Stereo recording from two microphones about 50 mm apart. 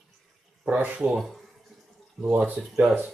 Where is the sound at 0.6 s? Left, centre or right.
Right.